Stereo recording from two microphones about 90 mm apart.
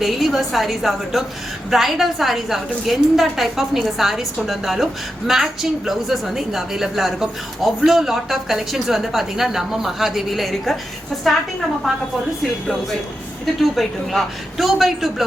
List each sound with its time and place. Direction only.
0.0 s a woman's voice: centre (ahead or behind)
12.4 s a woman's voice: 5° left (ahead or behind)